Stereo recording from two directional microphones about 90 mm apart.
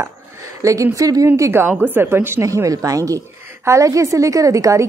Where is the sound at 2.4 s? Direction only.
40° right (ahead or behind).